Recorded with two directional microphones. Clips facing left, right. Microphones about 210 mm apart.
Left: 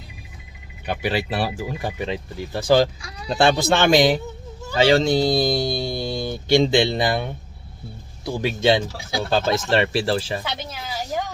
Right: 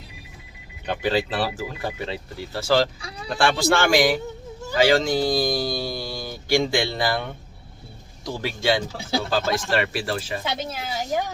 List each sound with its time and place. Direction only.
0.9 s speech: 10° left (ahead or behind); by 10.4 s 30° left (ahead or behind)
10.8 s a woman's voice: 20° right (ahead or behind)